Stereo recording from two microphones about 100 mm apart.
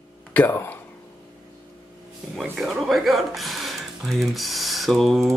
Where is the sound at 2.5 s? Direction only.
Centre (ahead or behind).